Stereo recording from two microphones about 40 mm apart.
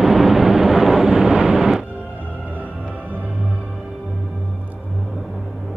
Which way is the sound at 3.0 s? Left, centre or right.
Right.